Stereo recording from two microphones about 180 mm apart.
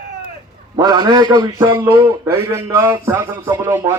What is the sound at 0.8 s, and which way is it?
A man's voice, 25° right (ahead or behind).